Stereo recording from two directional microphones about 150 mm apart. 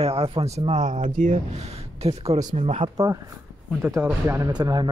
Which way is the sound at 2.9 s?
25° right (ahead or behind).